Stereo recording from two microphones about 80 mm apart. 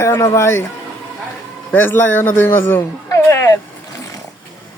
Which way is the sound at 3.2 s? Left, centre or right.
Left.